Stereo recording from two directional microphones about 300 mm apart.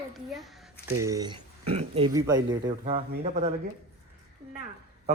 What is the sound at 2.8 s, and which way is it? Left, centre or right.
Speech, right.